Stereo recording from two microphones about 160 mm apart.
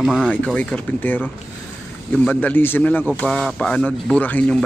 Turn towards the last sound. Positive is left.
turn(degrees=5)  # may be behind; listen again after turning